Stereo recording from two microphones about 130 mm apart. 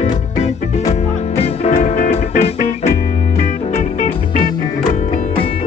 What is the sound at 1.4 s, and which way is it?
Music, 50° left (ahead or behind).